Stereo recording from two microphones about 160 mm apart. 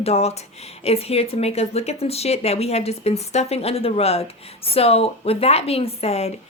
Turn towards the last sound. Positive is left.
turn(degrees=40)  # may be behind; listen again after turning